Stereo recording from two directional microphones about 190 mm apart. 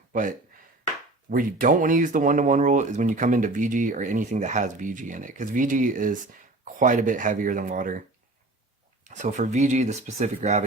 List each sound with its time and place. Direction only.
0.1 s speech: 45° right (ahead or behind)
9.0 s speech: 40° right (ahead or behind)